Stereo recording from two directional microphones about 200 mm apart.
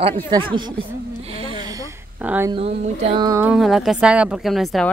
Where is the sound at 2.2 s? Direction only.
10° right (ahead or behind).